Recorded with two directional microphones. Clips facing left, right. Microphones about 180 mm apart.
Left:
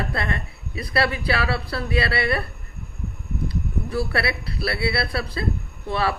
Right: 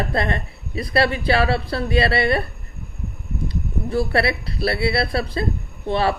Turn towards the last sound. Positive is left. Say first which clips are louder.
# right 4 dB
turn(degrees=-25)  # may be behind; listen again after turning